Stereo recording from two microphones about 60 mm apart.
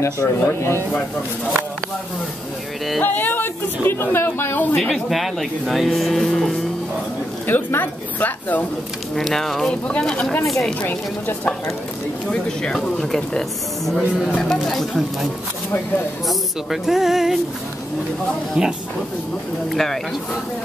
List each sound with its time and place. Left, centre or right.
0.0 s speech: left
3.0 s a man's voice: left
4.7 s speech: centre
7.4 s a man's voice: left
9.1 s speech: centre
10.8 s a man's voice: left
12.3 s speech: centre
16.3 s speech: centre
18.6 s speech: centre
19.7 s speech: centre